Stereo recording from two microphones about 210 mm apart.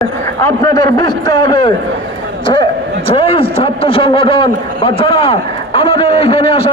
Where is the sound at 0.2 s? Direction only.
10° left (ahead or behind).